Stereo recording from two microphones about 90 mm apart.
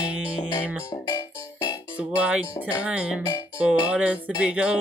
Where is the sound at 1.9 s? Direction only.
15° right (ahead or behind).